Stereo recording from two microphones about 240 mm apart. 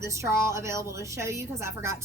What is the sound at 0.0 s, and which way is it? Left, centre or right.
A woman's voice, centre.